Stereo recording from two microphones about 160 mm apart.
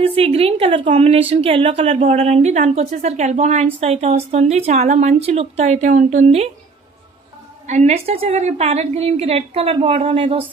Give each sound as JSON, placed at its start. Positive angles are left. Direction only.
{"t": 0.0, "sound": "a woman's voice", "side_deg": -35}
{"t": 7.6, "sound": "a woman's voice", "side_deg": -45}